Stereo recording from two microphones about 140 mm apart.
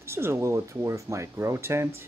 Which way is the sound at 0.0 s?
20° right (ahead or behind).